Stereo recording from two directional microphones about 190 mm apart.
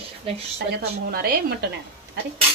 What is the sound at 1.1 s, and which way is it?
Speech, 55° right (ahead or behind).